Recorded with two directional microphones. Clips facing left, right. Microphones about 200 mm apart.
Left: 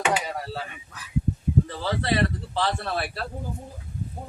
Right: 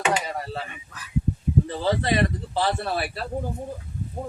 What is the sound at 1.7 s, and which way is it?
Speech, 15° right (ahead or behind).